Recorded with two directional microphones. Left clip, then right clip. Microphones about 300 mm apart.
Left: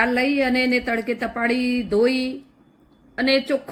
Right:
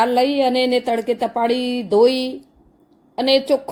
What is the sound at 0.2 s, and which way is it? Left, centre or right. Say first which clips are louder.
A woman's voice: right 4 dB; centre.